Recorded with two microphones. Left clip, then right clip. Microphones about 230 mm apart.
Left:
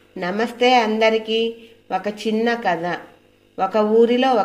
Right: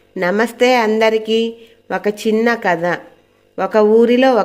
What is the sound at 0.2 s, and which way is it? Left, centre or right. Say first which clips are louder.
Speech: right 5 dB; right.